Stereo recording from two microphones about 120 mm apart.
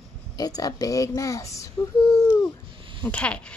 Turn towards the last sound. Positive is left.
turn(degrees=10)  # may be behind; listen again after turning